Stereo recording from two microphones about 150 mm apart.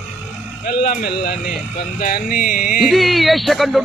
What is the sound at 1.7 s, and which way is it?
Speech, 75° left (ahead or behind).